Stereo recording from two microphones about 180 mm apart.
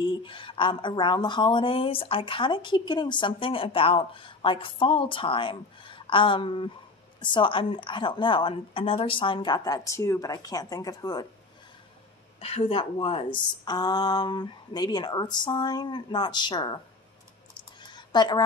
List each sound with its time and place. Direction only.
0.0 s speech: 25° left (ahead or behind)
12.4 s speech: 35° left (ahead or behind)
17.7 s a sound: 25° left (ahead or behind)